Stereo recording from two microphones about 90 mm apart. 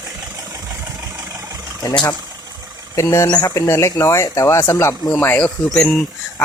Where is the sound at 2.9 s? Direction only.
35° left (ahead or behind); by 6.0 s 15° left (ahead or behind).